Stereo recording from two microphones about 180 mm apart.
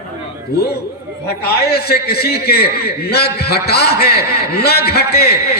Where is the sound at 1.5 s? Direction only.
60° left (ahead or behind).